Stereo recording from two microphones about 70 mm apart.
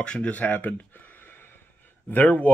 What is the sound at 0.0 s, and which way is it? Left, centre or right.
Speech, centre.